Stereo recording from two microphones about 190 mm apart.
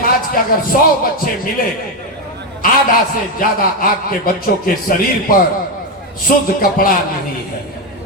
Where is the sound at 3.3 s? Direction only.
50° left (ahead or behind).